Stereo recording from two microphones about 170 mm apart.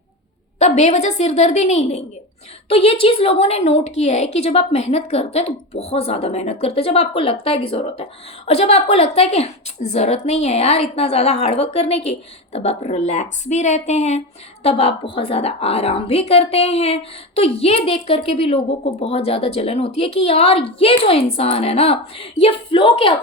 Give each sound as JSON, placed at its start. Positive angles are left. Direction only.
{"t": 0.6, "sound": "a woman's voice", "side_deg": 40}